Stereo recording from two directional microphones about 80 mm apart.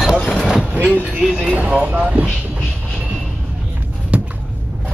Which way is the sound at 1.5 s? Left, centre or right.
Centre.